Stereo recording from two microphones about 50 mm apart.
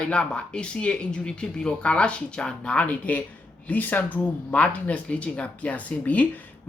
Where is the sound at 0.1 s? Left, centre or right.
Left.